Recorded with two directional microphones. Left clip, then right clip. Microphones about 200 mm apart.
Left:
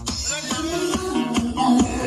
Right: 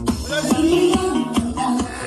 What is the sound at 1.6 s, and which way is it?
Music, 10° left (ahead or behind).